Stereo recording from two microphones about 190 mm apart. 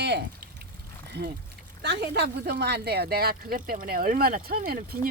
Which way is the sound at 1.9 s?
60° right (ahead or behind).